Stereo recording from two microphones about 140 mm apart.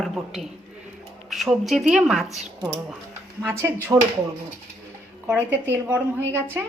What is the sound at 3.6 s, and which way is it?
Speech, 15° right (ahead or behind).